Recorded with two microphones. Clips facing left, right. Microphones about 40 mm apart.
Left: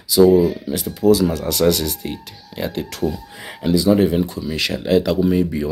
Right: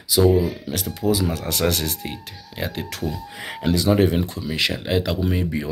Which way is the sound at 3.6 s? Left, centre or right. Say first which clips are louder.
Left 4 dB; right.